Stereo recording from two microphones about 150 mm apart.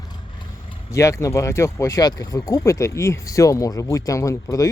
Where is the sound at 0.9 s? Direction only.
20° left (ahead or behind).